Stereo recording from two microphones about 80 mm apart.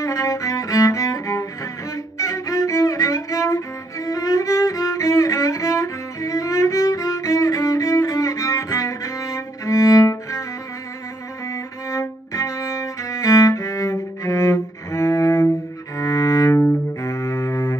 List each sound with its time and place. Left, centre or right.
0.0 s cello: left
11.9 s music: left
16.0 s cello: left